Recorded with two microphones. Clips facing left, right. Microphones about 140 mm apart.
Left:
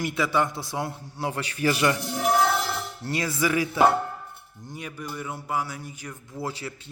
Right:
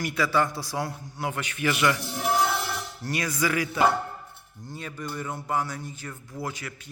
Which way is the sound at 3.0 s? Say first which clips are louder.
Left 1 dB; 25° left (ahead or behind).